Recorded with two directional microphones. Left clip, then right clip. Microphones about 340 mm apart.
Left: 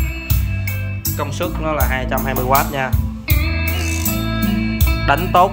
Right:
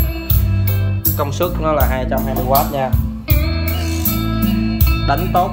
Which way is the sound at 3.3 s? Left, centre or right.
Left.